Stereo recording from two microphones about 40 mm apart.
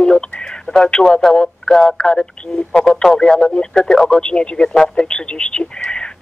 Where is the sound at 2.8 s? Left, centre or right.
Centre.